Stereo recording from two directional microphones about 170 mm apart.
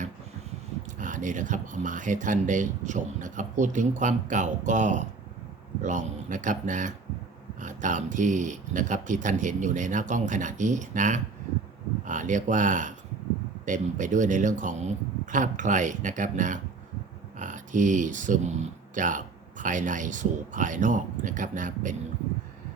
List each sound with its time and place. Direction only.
0.9 s speech: 50° right (ahead or behind)